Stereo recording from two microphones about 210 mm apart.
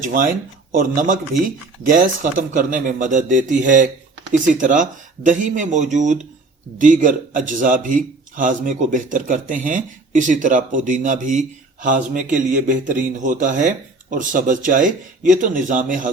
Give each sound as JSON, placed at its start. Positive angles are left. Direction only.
{"t": 0.0, "sound": "a man's voice", "side_deg": -40}